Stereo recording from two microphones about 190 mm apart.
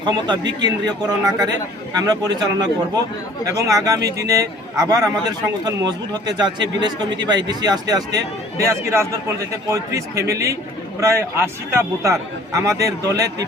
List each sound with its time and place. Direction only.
0.0 s a man's voice: 25° right (ahead or behind)